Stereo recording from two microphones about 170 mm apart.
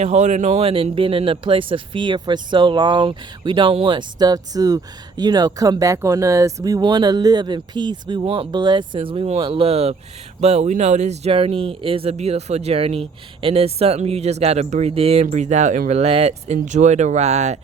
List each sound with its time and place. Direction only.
0.0 s speech: 40° right (ahead or behind)